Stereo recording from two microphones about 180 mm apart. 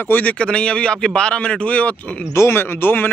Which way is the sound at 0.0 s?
10° left (ahead or behind).